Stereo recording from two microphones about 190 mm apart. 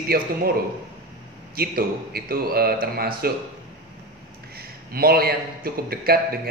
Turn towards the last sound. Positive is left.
turn(degrees=-55)  # may be behind; listen again after turning